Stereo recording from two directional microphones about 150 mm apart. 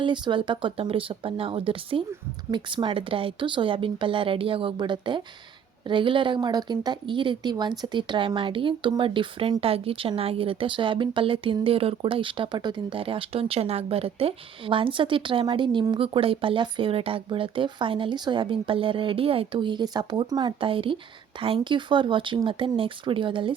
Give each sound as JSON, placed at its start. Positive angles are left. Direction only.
{"t": 0.0, "sound": "speech", "side_deg": -30}